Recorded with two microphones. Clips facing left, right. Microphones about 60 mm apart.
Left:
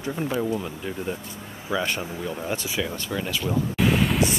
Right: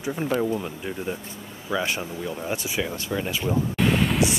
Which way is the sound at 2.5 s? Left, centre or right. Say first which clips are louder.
Right 1 dB; right.